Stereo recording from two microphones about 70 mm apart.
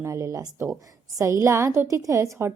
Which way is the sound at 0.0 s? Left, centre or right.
Right.